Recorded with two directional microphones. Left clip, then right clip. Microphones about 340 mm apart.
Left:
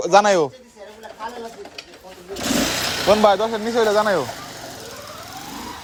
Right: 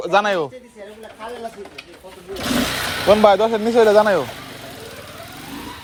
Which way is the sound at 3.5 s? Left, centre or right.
Centre.